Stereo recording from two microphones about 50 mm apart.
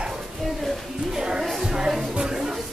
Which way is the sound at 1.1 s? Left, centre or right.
Centre.